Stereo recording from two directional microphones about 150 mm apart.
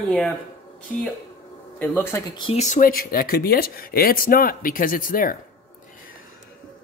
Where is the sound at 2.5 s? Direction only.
55° left (ahead or behind).